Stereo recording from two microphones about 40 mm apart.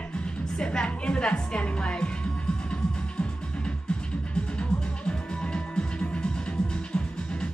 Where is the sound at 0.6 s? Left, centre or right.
Left.